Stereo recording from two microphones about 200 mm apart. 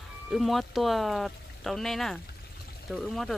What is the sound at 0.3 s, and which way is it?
Speech, centre (ahead or behind).